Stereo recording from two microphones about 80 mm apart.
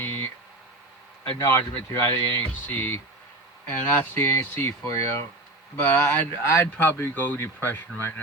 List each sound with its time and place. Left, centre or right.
0.0 s a sound: left
1.4 s speech: left
4.8 s speech: left
5.8 s speech: left